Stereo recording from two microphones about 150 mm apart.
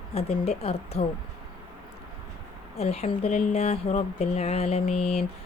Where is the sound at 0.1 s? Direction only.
40° left (ahead or behind).